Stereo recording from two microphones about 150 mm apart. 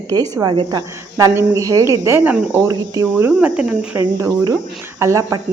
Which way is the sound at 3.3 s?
5° right (ahead or behind).